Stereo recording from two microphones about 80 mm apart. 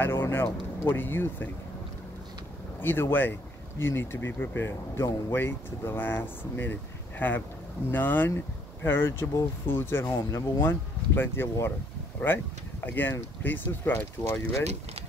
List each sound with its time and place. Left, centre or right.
0.0 s speech: left
2.8 s speech: left